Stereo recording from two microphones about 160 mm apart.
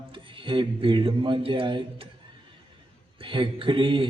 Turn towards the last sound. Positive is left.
turn(degrees=-30)  # may be behind; listen again after turning